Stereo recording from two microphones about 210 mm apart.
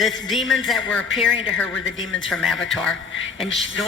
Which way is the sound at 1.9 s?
65° left (ahead or behind).